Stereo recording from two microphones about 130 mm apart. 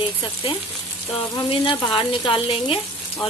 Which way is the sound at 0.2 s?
40° left (ahead or behind).